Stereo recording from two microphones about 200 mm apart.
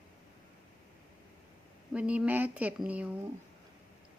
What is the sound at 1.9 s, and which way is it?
Speech, 5° right (ahead or behind).